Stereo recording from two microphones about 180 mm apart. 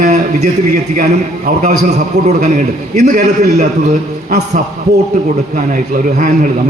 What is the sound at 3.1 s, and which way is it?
A man's voice, 45° right (ahead or behind).